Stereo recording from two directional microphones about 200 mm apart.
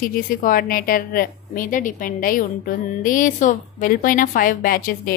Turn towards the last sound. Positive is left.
turn(degrees=45)  # may be behind; listen again after turning